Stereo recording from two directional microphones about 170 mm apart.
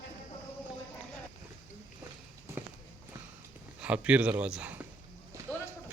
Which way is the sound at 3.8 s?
5° right (ahead or behind).